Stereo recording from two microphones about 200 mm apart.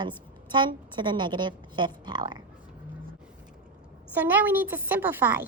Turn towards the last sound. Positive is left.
turn(degrees=-10)  # may be behind; listen again after turning